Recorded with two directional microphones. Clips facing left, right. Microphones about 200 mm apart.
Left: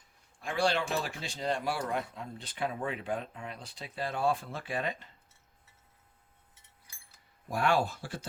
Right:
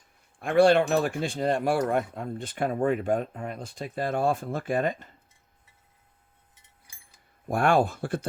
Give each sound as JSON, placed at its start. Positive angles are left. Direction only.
{"t": 0.3, "sound": "speech", "side_deg": -55}
{"t": 7.4, "sound": "speech", "side_deg": -50}